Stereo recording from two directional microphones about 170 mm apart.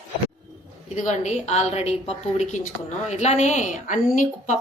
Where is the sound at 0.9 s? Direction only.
45° left (ahead or behind).